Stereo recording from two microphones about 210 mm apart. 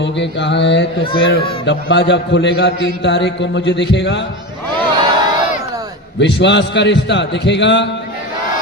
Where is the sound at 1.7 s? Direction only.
55° left (ahead or behind).